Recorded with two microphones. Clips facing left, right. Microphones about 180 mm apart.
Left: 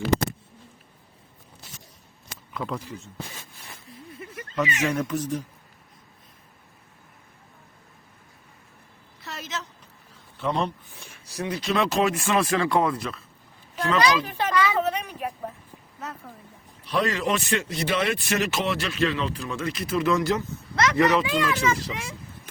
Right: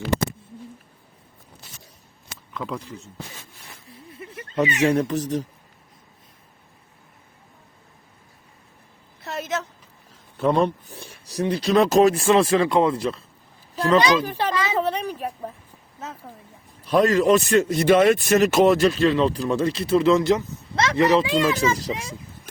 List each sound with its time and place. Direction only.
2.5 s speech: 5° left (ahead or behind)
4.2 s speech: 30° right (ahead or behind)
9.2 s a sound: 55° right (ahead or behind)
10.3 s a man's voice: 50° right (ahead or behind)
10.9 s a man's voice: 35° right (ahead or behind)
14.6 s a sound: 30° right (ahead or behind)
16.8 s a man's voice: 45° right (ahead or behind)